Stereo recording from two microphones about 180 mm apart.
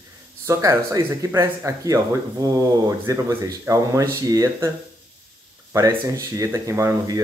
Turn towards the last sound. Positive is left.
turn(degrees=-15)  # may be behind; listen again after turning